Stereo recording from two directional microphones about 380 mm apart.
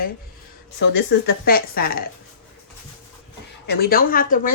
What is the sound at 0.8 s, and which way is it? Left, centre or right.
Speech, left.